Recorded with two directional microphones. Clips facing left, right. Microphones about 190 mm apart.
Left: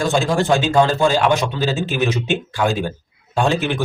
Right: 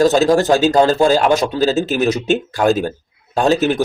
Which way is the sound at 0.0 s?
40° right (ahead or behind).